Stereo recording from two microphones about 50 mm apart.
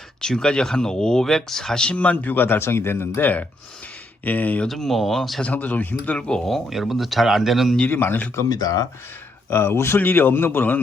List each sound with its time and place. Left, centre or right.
0.2 s speech: centre
2.0 s speech: left
4.2 s speech: left
4.7 s speech: centre
5.4 s speech: left
6.1 s speech: centre
6.5 s speech: centre
7.9 s speech: left
9.5 s speech: left
10.0 s speech: left